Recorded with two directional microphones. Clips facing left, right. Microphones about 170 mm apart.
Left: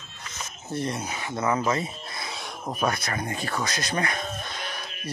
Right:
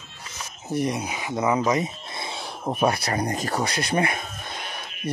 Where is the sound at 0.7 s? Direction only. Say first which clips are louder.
Right 4 dB; 15° right (ahead or behind).